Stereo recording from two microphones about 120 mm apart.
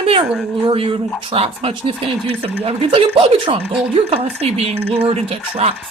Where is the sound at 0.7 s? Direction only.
50° right (ahead or behind).